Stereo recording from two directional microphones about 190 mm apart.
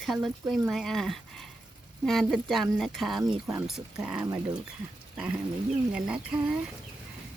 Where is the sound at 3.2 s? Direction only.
15° right (ahead or behind).